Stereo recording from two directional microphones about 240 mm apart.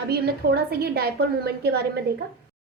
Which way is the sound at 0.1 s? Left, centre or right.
Right.